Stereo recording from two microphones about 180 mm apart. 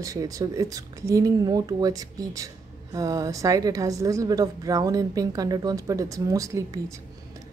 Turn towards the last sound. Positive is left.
turn(degrees=-20)  # may be behind; listen again after turning